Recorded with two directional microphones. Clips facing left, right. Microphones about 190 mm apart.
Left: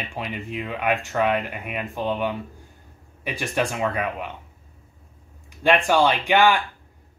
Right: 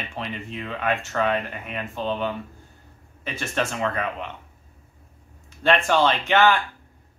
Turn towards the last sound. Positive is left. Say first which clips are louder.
# left 1 dB
turn(degrees=10)  # may be behind; listen again after turning